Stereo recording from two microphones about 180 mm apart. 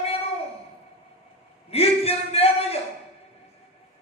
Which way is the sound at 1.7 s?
35° left (ahead or behind).